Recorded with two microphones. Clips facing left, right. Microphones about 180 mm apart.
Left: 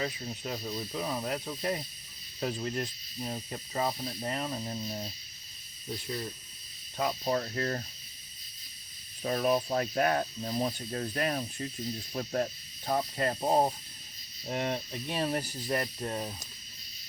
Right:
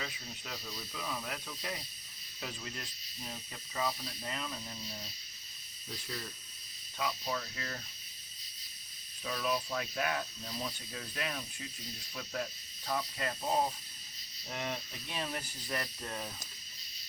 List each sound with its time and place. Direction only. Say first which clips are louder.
0.0 s speech: left 9 dB; 40° left (ahead or behind)
6.1 s speech: left 6 dB; 25° left (ahead or behind)
6.9 s speech: left 7 dB; 40° left (ahead or behind)
9.2 s speech: left 7 dB; 45° left (ahead or behind)